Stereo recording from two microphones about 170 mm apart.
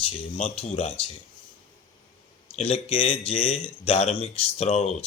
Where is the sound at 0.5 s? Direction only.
40° left (ahead or behind).